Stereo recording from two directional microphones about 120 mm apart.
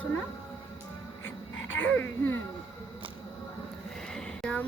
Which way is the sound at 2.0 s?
20° left (ahead or behind).